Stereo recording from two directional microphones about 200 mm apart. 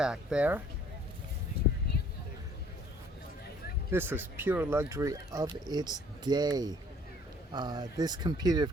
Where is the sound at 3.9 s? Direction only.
10° right (ahead or behind).